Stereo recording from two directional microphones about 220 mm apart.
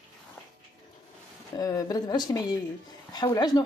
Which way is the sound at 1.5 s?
15° left (ahead or behind).